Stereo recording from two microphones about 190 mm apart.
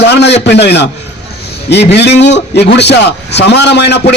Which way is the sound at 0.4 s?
60° left (ahead or behind).